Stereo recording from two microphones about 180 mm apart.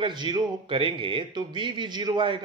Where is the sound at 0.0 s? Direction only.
25° right (ahead or behind).